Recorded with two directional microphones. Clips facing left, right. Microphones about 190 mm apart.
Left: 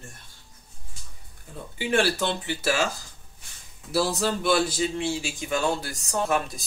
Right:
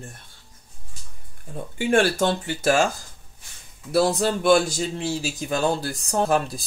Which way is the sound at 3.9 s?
50° right (ahead or behind).